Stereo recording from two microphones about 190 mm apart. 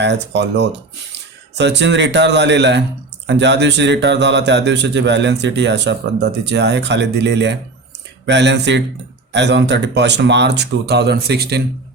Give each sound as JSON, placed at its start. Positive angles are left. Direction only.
{"t": 0.0, "sound": "a man's voice", "side_deg": -65}